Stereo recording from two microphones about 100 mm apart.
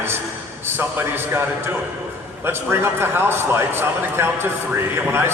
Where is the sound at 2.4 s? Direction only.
25° right (ahead or behind).